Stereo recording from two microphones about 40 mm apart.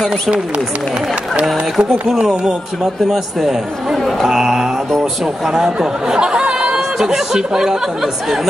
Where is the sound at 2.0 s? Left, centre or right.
Centre.